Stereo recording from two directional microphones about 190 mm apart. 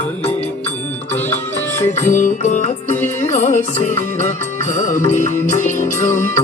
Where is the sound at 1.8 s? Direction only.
40° left (ahead or behind).